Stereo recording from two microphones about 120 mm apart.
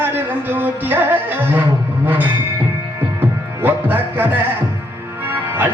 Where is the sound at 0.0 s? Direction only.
15° right (ahead or behind).